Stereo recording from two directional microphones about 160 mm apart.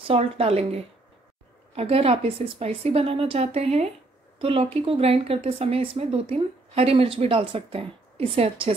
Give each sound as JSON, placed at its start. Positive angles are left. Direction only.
{"t": 0.0, "sound": "speech", "side_deg": -35}